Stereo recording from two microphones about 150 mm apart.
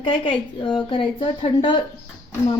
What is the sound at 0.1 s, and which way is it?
A woman's voice, 35° left (ahead or behind).